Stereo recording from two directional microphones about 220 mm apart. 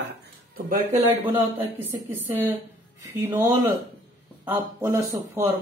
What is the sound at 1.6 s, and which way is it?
Speech, 10° right (ahead or behind).